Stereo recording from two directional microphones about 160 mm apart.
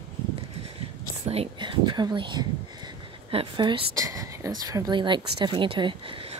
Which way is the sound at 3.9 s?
20° right (ahead or behind).